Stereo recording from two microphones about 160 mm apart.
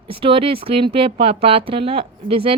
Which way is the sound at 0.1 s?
35° right (ahead or behind).